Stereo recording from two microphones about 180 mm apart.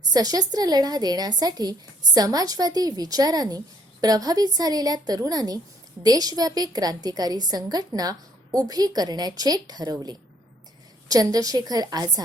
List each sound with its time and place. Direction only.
0.1 s a woman's voice: 20° right (ahead or behind)